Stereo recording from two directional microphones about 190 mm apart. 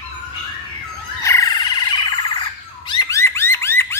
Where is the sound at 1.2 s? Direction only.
20° left (ahead or behind).